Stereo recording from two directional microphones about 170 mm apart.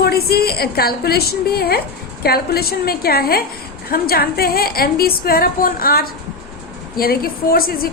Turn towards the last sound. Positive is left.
turn(degrees=60)  # may be behind; listen again after turning